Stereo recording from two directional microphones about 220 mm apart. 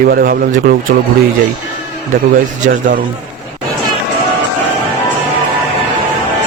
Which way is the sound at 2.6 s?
35° right (ahead or behind).